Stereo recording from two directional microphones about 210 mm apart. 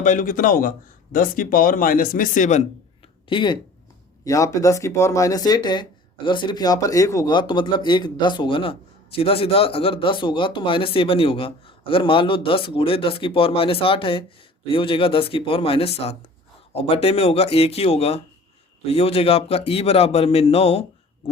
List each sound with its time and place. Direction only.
0.0 s speech: 40° left (ahead or behind)
3.2 s speech: 20° left (ahead or behind)